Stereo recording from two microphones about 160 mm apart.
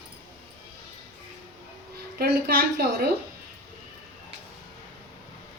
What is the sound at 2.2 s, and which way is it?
Speech, 75° right (ahead or behind).